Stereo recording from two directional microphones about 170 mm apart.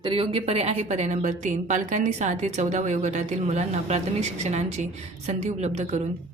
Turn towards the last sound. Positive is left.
turn(degrees=-40)  # may be behind; listen again after turning